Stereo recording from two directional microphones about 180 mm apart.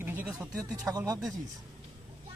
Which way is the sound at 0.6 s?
20° right (ahead or behind).